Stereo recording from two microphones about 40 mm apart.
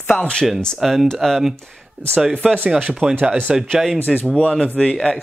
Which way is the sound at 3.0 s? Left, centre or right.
Right.